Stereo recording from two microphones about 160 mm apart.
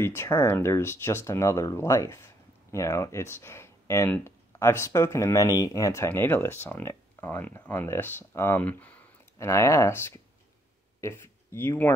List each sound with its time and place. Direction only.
0.0 s speech: 15° left (ahead or behind)